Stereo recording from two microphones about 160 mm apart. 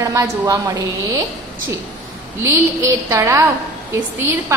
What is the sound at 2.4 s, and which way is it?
A woman's voice, 20° right (ahead or behind).